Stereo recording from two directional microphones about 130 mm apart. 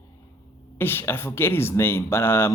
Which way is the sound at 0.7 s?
20° left (ahead or behind).